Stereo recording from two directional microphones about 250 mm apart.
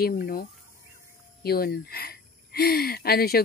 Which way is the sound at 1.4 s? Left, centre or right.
Left.